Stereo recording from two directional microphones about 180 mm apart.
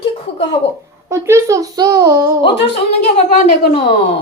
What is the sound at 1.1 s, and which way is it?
A child's voice, 15° right (ahead or behind).